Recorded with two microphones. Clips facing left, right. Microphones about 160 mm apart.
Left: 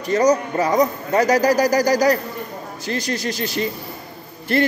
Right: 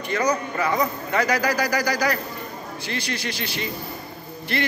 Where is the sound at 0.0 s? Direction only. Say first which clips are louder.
Left 7 dB; 40° left (ahead or behind).